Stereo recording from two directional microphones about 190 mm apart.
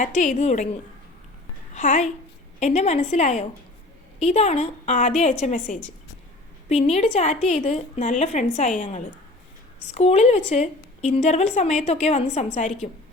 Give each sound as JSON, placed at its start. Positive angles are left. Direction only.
{"t": 0.0, "sound": "a woman's voice", "side_deg": 40}